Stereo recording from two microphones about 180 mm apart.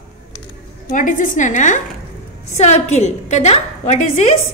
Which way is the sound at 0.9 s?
45° left (ahead or behind).